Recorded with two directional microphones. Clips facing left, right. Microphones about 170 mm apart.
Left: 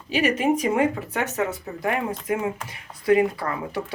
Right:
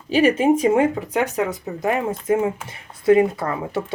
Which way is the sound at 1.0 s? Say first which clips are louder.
Right 4 dB; 15° right (ahead or behind).